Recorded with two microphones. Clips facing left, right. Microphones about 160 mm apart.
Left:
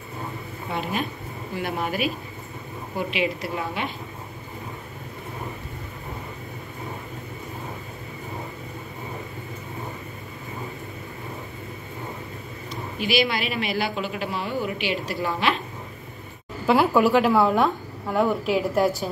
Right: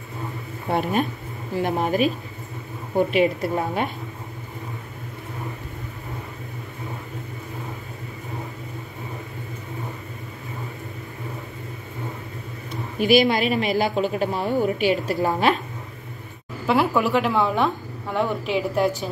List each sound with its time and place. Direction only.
0.7 s speech: 55° right (ahead or behind)
1.6 s speech: 35° right (ahead or behind)
13.0 s speech: 45° right (ahead or behind)
16.6 s a woman's voice: centre (ahead or behind)